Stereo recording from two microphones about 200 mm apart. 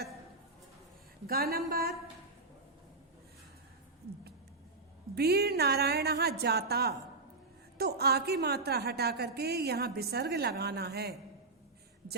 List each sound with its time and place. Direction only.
1.3 s a woman's voice: 50° right (ahead or behind)
5.1 s a woman's voice: 55° right (ahead or behind)